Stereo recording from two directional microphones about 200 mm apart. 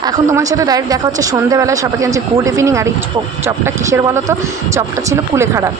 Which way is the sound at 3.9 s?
15° right (ahead or behind).